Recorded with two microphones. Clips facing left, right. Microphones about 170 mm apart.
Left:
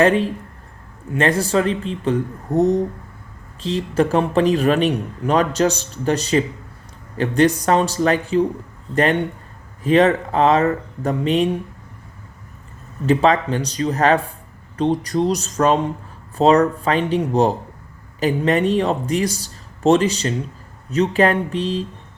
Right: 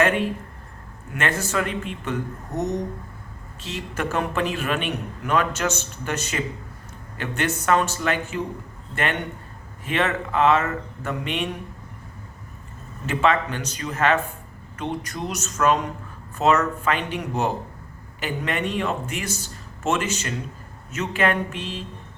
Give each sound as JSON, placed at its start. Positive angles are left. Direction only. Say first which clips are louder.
{"t": 0.0, "sound": "a man's voice", "louder": "left 5 dB", "side_deg": 35}
{"t": 13.1, "sound": "a man's voice", "louder": "left 6 dB", "side_deg": 35}